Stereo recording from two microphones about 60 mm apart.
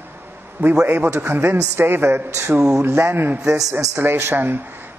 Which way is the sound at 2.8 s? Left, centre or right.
Right.